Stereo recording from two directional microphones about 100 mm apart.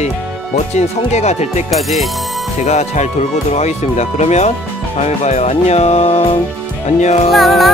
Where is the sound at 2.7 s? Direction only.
90° left.